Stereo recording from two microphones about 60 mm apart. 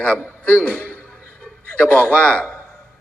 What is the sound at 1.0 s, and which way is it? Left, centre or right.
Music, centre.